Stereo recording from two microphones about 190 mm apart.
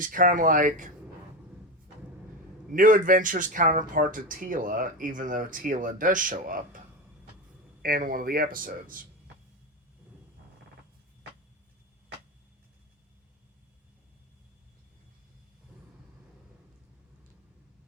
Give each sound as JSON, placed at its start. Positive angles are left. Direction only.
{"t": 0.0, "sound": "speech", "side_deg": -45}
{"t": 2.7, "sound": "speech", "side_deg": -45}